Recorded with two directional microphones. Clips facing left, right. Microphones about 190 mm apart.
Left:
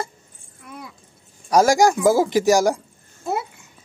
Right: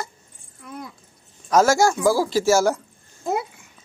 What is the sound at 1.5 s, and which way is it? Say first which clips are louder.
A man's voice: left 2 dB; 15° left (ahead or behind).